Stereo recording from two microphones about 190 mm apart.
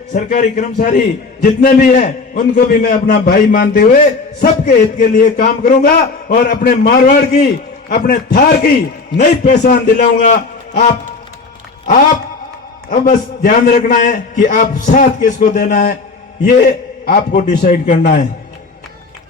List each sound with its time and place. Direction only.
0.3 s a man's voice: 40° left (ahead or behind)
9.1 s a man's voice: 40° left (ahead or behind)
12.9 s a man's voice: 45° left (ahead or behind)
17.7 s a man's voice: 45° left (ahead or behind)